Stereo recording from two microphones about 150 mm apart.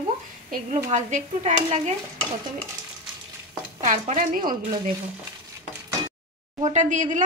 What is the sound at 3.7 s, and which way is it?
Speech, 55° right (ahead or behind).